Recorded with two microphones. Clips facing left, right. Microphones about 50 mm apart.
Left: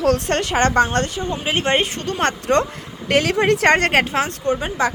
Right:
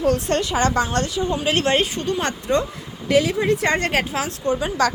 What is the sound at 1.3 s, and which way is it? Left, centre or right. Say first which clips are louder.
Speech: left 1 dB; left.